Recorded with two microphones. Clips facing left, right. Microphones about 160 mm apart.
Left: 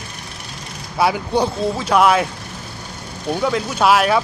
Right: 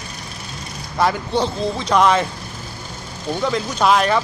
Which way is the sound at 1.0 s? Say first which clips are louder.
Left 1 dB; 10° left (ahead or behind).